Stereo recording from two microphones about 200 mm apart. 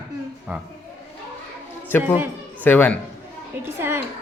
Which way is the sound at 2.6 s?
10° left (ahead or behind).